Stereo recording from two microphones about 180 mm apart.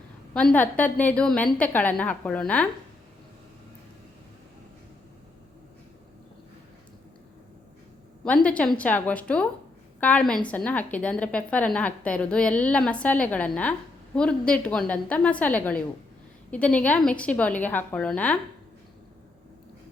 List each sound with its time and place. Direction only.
0.3 s a woman's voice: 10° left (ahead or behind)
8.2 s a woman's voice: 5° left (ahead or behind)